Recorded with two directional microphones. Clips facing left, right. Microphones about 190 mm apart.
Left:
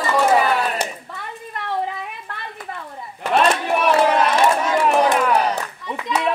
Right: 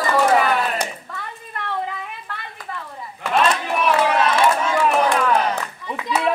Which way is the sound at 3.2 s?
40° left (ahead or behind).